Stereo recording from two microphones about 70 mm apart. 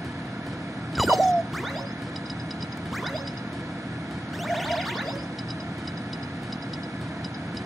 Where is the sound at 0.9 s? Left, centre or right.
Centre.